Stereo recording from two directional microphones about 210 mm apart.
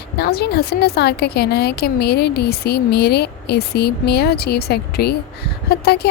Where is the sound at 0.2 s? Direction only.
50° left (ahead or behind).